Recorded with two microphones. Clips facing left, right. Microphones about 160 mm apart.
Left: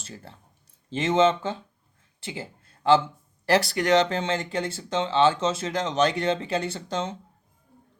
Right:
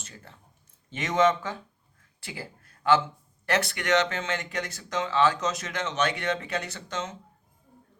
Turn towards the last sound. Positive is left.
turn(degrees=30)  # may be behind; listen again after turning